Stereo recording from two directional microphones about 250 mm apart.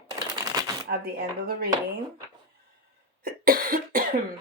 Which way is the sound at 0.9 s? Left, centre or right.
Right.